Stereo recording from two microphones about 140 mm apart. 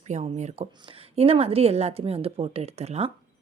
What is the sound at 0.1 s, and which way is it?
A woman's voice, 55° right (ahead or behind).